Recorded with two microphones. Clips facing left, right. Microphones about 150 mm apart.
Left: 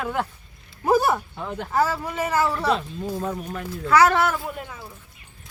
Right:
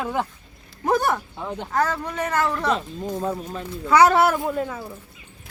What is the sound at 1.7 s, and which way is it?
Speech, 10° left (ahead or behind).